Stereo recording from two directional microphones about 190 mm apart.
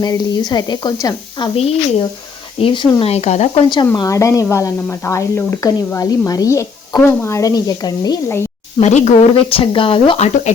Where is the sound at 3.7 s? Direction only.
20° left (ahead or behind).